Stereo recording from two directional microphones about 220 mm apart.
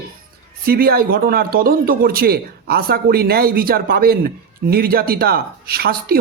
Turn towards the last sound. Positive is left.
turn(degrees=-45)  # may be behind; listen again after turning